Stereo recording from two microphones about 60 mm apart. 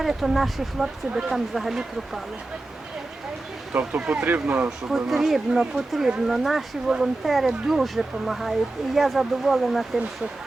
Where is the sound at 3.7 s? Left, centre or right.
Centre.